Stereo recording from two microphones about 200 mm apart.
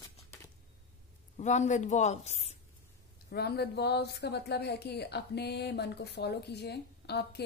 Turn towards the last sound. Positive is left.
turn(degrees=55)  # may be behind; listen again after turning